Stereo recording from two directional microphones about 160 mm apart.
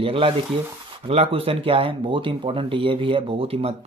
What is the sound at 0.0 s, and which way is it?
Speech, 35° right (ahead or behind).